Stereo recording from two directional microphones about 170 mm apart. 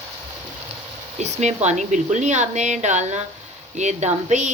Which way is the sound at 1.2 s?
40° right (ahead or behind).